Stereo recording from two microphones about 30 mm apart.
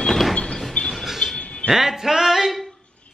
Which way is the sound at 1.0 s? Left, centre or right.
Centre.